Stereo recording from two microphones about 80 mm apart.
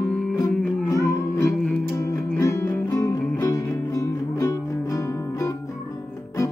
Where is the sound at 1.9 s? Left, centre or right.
Left.